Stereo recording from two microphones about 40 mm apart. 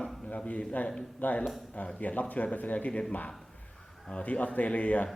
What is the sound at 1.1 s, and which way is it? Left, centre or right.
Speech, left.